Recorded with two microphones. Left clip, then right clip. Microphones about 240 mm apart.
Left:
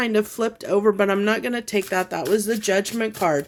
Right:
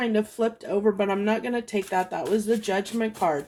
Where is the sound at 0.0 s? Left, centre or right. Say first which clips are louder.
Left 3 dB; left.